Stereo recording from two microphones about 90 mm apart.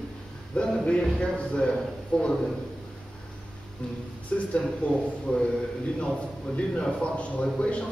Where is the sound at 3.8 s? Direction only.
10° left (ahead or behind).